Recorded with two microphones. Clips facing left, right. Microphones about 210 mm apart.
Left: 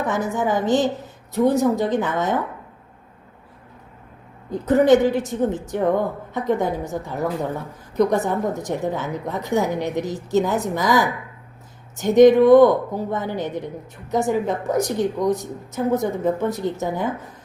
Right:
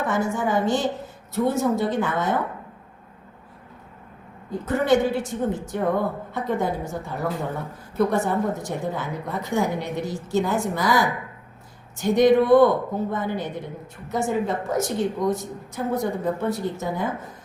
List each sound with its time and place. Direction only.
0.0 s a woman's voice: 20° left (ahead or behind)
4.5 s speech: 20° left (ahead or behind)